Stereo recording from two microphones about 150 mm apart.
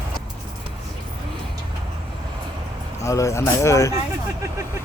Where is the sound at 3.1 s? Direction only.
20° left (ahead or behind).